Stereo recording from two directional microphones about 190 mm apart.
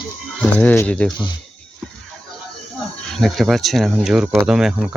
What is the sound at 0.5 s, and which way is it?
Speech, 10° left (ahead or behind).